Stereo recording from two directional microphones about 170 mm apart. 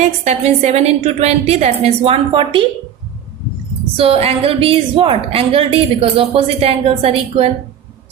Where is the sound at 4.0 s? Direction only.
35° right (ahead or behind).